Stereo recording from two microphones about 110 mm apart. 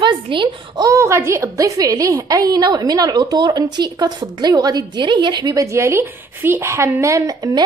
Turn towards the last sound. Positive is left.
turn(degrees=-35)  # may be behind; listen again after turning